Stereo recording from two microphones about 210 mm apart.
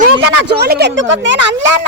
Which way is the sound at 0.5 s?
50° right (ahead or behind).